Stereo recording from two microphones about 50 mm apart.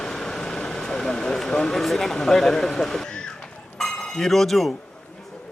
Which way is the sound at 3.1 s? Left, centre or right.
Centre.